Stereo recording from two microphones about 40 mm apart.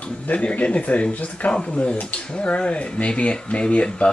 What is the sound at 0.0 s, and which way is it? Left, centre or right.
Speech, left.